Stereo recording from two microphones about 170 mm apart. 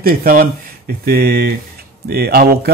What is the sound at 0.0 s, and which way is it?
Speech, 60° right (ahead or behind).